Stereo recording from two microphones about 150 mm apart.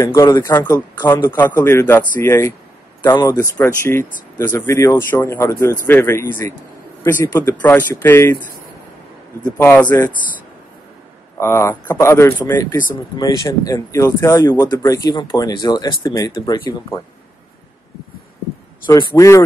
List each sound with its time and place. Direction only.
0.0 s speech: 20° left (ahead or behind)
9.6 s speech: 10° left (ahead or behind)
11.3 s speech: 15° left (ahead or behind)
18.9 s speech: 20° left (ahead or behind)